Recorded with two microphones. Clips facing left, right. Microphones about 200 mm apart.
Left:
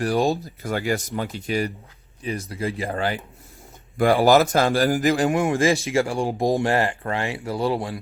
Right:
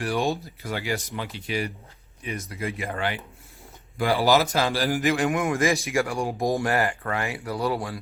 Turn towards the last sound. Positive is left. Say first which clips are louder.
# left 3 dB
turn(degrees=25)  # may be behind; listen again after turning